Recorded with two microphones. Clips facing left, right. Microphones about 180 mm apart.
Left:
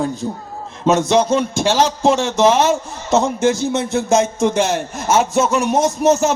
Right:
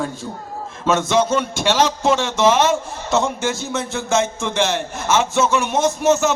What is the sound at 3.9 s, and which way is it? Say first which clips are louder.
A man's voice: left 4 dB; 35° left (ahead or behind).